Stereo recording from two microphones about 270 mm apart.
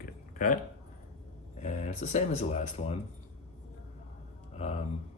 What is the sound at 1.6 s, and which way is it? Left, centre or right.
Speech, left.